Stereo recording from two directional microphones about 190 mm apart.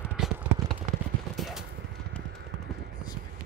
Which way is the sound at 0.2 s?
5° right (ahead or behind).